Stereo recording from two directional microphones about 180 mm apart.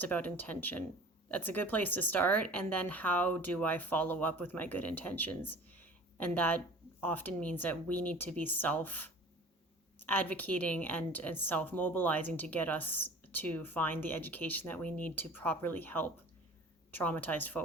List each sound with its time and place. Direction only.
0.0 s a woman's voice: 10° left (ahead or behind)
10.1 s a woman's voice: 10° left (ahead or behind)